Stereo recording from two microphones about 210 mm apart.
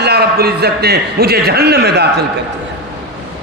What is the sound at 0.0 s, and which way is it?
A man's voice, 50° right (ahead or behind).